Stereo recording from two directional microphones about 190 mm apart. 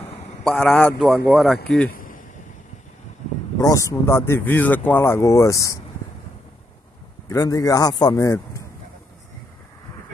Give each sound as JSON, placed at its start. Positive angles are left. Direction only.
{"t": 0.4, "sound": "a man's voice", "side_deg": 5}
{"t": 1.9, "sound": "a sound", "side_deg": 45}
{"t": 3.5, "sound": "speech", "side_deg": 15}
{"t": 7.2, "sound": "a man's voice", "side_deg": 15}